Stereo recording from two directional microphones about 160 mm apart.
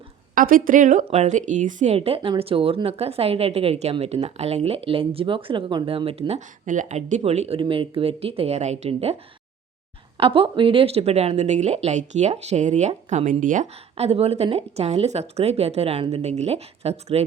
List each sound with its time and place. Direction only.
0.3 s a woman's voice: 60° right (ahead or behind); by 9.1 s 40° right (ahead or behind)
10.2 s speech: 35° right (ahead or behind)